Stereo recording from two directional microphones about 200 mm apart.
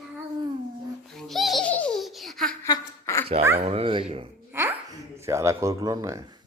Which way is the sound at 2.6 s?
15° left (ahead or behind).